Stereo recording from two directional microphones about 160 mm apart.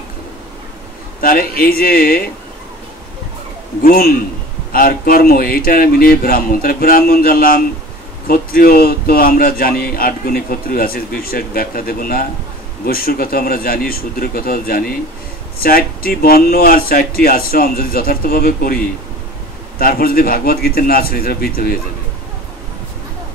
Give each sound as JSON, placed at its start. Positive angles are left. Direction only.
{"t": 1.2, "sound": "a man's voice", "side_deg": 65}
{"t": 3.8, "sound": "a man's voice", "side_deg": 70}
{"t": 19.8, "sound": "a man's voice", "side_deg": 65}